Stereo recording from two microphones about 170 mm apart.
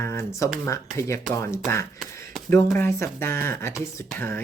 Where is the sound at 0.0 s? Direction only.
15° left (ahead or behind).